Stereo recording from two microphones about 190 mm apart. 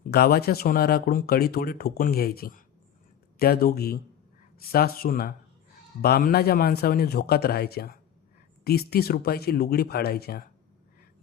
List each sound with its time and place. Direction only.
0.1 s a man's voice: 55° left (ahead or behind)